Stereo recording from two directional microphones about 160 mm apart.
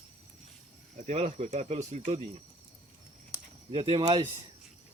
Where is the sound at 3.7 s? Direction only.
35° right (ahead or behind).